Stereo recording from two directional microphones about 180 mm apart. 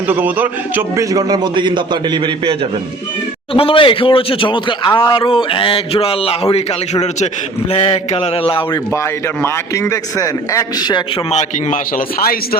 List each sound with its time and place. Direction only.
0.1 s a man's voice: 10° right (ahead or behind); by 2.6 s 30° right (ahead or behind)
3.5 s a man's voice: 30° left (ahead or behind)
7.7 s a sound: 35° left (ahead or behind)
9.4 s a man's voice: 15° left (ahead or behind)
11.3 s a man's voice: 40° left (ahead or behind)